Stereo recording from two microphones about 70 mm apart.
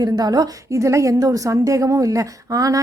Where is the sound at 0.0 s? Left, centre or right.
Right.